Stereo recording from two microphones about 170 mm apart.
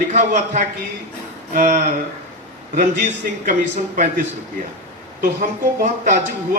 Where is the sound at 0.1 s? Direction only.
45° right (ahead or behind).